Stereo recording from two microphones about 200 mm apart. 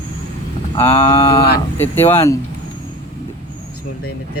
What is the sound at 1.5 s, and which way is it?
Speech, 10° left (ahead or behind).